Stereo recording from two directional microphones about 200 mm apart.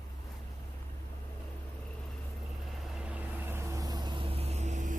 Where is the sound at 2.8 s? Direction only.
5° right (ahead or behind).